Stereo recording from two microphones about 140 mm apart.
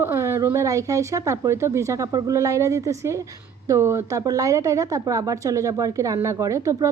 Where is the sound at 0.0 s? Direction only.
15° right (ahead or behind).